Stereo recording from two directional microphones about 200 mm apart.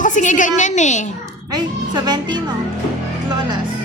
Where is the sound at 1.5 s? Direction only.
20° right (ahead or behind).